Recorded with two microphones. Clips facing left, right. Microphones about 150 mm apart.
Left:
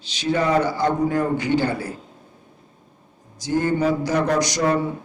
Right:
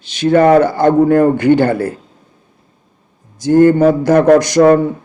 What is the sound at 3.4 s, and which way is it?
Speech, 55° right (ahead or behind).